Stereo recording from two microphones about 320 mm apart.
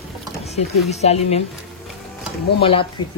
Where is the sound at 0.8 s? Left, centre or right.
Centre.